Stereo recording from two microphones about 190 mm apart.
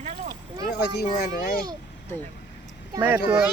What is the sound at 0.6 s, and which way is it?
Speech, 60° left (ahead or behind).